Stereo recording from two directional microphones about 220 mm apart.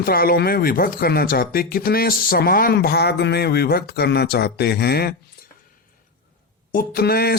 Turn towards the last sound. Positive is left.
turn(degrees=45)  # may be behind; listen again after turning